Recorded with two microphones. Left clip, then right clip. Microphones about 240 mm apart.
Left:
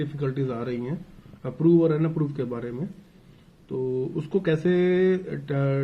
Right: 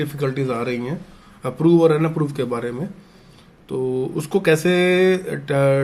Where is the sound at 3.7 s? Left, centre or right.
Right.